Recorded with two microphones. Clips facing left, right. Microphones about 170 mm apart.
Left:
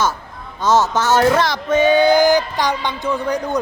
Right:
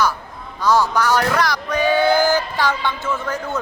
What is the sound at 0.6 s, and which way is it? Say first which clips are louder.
A man's voice: left 1 dB; 25° left (ahead or behind).